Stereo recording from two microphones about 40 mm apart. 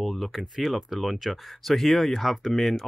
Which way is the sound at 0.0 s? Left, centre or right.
Centre.